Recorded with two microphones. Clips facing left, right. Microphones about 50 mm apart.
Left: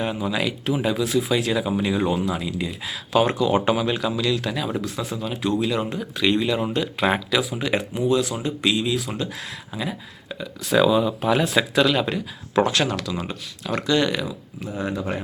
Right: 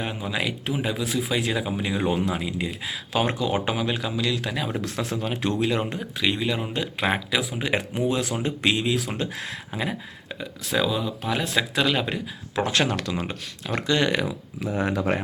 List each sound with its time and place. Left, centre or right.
0.0 s speech: centre
2.3 s speech: right
4.8 s speech: right
6.1 s speech: centre
7.6 s speech: right
10.7 s speech: centre
11.7 s speech: centre
12.7 s speech: right
13.7 s speech: right
14.8 s speech: right